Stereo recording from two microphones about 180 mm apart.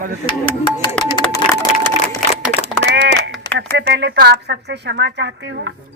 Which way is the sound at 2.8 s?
80° right.